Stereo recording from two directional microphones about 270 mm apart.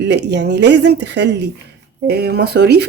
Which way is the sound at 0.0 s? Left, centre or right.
Right.